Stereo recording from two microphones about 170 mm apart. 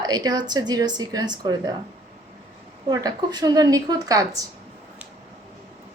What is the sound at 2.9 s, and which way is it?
A woman's voice, 25° right (ahead or behind).